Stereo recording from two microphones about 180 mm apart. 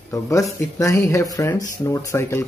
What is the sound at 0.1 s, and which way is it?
Speech, 20° left (ahead or behind).